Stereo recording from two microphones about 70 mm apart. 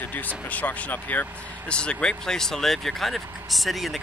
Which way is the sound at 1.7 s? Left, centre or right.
Centre.